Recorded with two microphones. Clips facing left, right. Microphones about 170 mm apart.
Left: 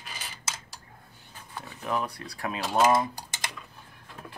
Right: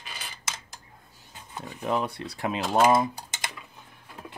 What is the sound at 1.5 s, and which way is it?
Speech, 20° right (ahead or behind).